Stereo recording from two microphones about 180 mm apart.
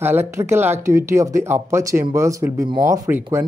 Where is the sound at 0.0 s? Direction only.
10° right (ahead or behind).